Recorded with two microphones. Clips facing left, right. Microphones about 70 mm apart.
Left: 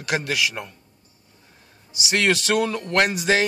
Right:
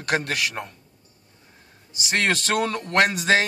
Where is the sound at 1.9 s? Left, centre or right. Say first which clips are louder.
Left 2 dB; right.